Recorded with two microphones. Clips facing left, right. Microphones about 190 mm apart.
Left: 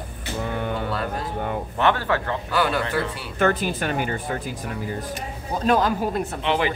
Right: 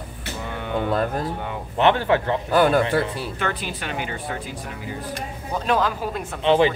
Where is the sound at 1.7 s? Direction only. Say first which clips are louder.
Right 4 dB; 20° right (ahead or behind).